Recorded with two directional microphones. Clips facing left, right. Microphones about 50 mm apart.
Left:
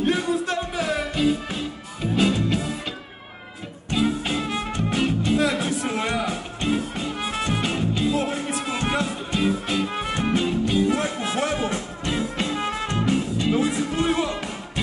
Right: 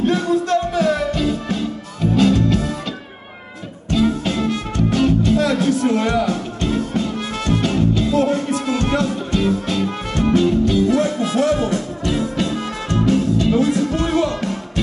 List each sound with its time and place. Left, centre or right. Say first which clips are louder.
0.0 s music: right 5 dB; centre
3.9 s music: right 5 dB; centre